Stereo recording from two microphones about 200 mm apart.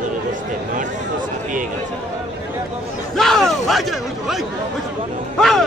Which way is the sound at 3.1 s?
Centre (ahead or behind).